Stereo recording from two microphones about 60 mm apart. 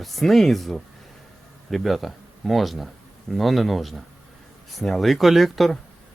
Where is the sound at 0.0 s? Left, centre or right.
Centre.